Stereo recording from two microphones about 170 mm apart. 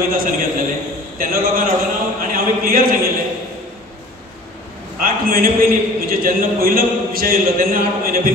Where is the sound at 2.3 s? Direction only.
55° right (ahead or behind).